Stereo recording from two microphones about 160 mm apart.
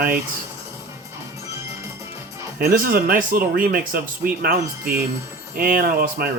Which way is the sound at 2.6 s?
65° right (ahead or behind).